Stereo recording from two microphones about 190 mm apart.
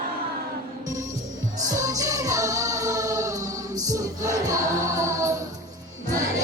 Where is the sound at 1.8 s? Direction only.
15° right (ahead or behind).